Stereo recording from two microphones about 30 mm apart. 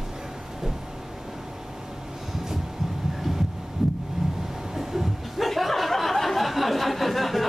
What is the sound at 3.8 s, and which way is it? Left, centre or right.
Heart sounds, centre.